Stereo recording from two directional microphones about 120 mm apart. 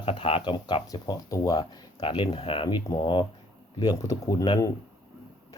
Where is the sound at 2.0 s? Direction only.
40° left (ahead or behind).